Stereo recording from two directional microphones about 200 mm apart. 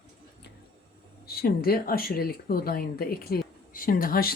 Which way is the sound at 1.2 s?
50° left (ahead or behind).